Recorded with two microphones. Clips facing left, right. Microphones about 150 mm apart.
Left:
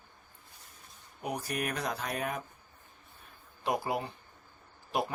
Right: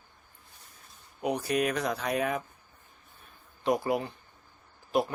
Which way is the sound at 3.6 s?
Centre (ahead or behind).